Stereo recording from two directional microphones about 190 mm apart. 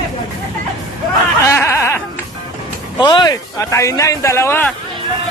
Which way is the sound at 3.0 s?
20° left (ahead or behind).